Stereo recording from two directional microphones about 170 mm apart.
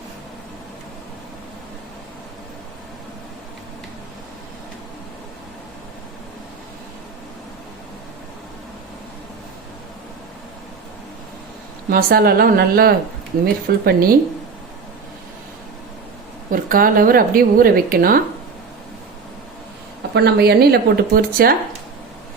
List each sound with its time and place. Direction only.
11.9 s a woman's voice: 60° right (ahead or behind)
16.5 s a woman's voice: 55° right (ahead or behind)
20.1 s speech: 70° right (ahead or behind)